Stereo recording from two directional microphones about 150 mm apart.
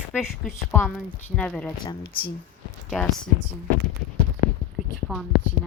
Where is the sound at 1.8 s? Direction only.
30° left (ahead or behind).